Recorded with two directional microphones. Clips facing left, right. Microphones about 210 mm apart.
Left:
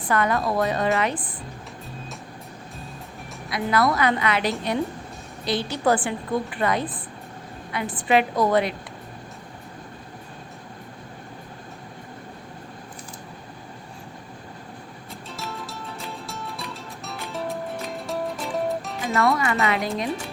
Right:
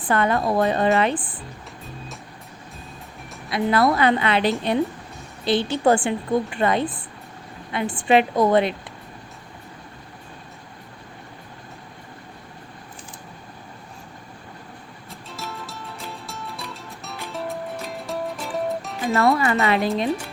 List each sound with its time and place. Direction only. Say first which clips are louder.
0.1 s a woman's voice: right 2 dB; 30° right (ahead or behind)
3.5 s a woman's voice: right 3 dB; 25° right (ahead or behind)
15.3 s music: even; centre (ahead or behind)
19.1 s a woman's voice: right 3 dB; 30° right (ahead or behind)